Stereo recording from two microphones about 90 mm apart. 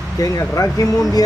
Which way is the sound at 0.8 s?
40° left (ahead or behind).